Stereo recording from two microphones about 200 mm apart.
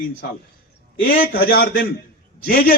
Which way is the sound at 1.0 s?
45° left (ahead or behind).